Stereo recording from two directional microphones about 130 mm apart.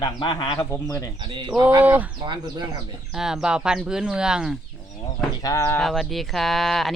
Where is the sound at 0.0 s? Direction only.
35° left (ahead or behind).